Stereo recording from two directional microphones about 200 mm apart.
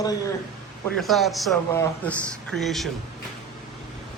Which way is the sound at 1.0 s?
Centre (ahead or behind).